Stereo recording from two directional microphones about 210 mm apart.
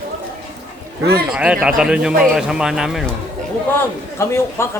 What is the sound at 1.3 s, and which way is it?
A man's voice, 5° right (ahead or behind).